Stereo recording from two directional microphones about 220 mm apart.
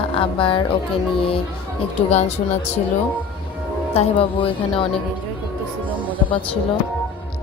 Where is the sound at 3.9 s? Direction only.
25° left (ahead or behind).